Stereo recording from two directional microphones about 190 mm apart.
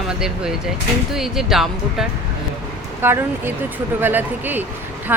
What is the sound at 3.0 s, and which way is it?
Speech, 10° right (ahead or behind).